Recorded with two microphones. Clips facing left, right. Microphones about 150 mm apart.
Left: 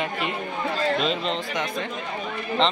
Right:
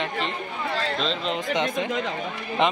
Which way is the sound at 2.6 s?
15° right (ahead or behind).